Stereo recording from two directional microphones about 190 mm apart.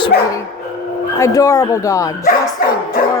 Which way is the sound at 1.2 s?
15° left (ahead or behind).